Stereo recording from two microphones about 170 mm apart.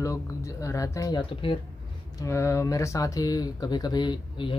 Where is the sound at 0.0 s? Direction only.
15° left (ahead or behind).